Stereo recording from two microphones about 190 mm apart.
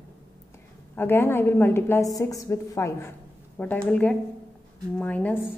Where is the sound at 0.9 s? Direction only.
10° left (ahead or behind).